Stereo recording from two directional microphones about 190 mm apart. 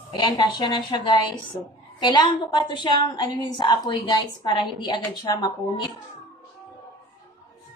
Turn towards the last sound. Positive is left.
turn(degrees=20)  # may be behind; listen again after turning